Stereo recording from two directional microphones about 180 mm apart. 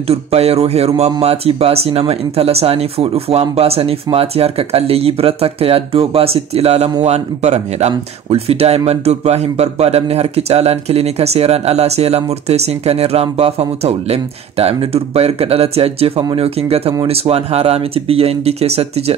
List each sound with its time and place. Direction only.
0.1 s speech: 35° right (ahead or behind)